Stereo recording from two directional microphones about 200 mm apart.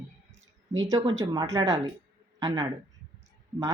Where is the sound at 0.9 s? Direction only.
20° right (ahead or behind).